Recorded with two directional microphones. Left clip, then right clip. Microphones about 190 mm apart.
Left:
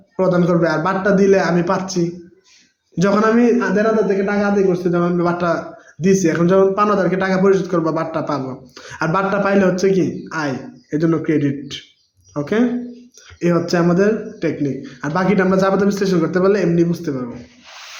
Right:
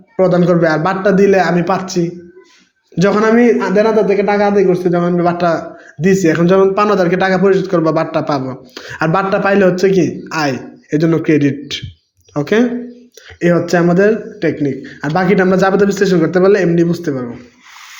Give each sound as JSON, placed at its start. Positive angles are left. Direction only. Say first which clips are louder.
{"t": 0.2, "sound": "a man's voice", "louder": "right 5 dB", "side_deg": -15}